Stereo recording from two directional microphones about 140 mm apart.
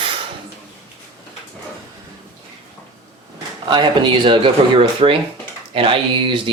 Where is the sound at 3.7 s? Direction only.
35° right (ahead or behind).